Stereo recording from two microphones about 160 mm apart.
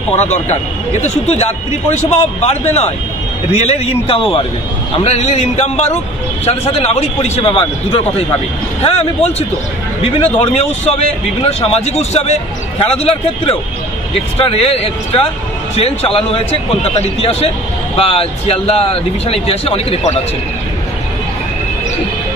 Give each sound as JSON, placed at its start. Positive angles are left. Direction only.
{"t": 0.1, "sound": "a man's voice", "side_deg": 45}